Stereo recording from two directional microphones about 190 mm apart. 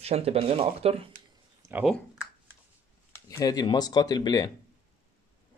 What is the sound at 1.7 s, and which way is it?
Speech, centre (ahead or behind).